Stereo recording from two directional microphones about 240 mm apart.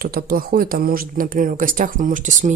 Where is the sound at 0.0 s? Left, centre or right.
Right.